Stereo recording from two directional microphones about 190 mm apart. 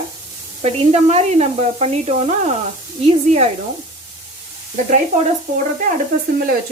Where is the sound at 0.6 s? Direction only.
35° right (ahead or behind).